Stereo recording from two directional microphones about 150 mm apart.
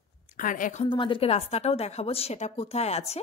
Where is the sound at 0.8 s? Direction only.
35° left (ahead or behind).